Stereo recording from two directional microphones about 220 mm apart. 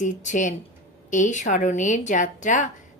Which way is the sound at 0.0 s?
35° left (ahead or behind).